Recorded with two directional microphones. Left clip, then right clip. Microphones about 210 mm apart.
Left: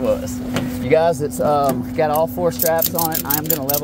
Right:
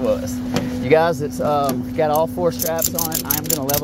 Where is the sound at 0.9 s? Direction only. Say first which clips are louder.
Even; 15° right (ahead or behind).